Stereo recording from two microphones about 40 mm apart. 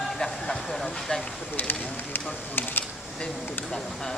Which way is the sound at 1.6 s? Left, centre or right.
Left.